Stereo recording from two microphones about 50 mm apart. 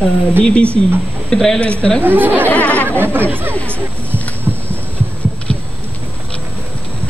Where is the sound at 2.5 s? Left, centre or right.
Left.